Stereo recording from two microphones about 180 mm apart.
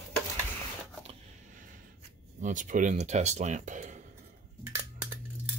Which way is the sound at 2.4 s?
45° right (ahead or behind).